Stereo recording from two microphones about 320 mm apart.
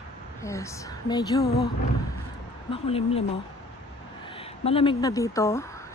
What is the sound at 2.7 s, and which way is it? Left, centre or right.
Speech, centre.